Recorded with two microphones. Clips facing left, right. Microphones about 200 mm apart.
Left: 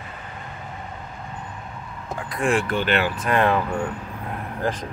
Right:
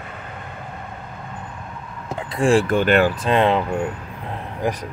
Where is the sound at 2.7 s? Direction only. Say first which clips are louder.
Right 6 dB; 45° right (ahead or behind).